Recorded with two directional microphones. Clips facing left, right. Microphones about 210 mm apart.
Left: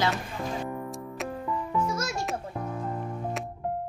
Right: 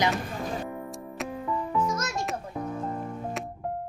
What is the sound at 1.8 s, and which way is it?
Music, 10° left (ahead or behind).